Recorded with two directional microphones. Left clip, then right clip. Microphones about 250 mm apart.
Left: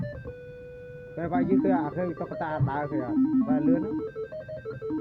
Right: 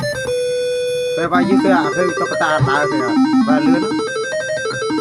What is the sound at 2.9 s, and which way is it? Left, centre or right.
Music, right.